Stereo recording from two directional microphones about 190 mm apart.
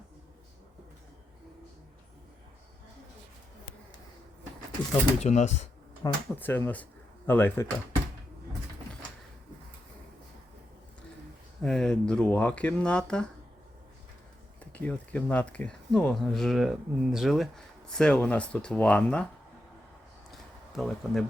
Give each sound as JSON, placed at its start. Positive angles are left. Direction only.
{"t": 5.2, "sound": "speech", "side_deg": 40}
{"t": 6.0, "sound": "speech", "side_deg": 10}
{"t": 11.6, "sound": "speech", "side_deg": 5}
{"t": 14.6, "sound": "speech", "side_deg": 10}
{"t": 20.7, "sound": "speech", "side_deg": 0}